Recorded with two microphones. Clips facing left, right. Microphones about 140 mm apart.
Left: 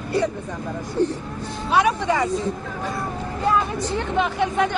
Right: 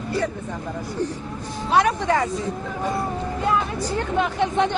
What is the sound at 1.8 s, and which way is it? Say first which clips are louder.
Speech: even; 15° left (ahead or behind).